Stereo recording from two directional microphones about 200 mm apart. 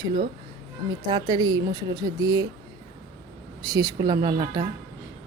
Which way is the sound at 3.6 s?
20° right (ahead or behind).